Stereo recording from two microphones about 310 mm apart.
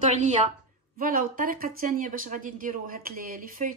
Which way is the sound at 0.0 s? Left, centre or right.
Right.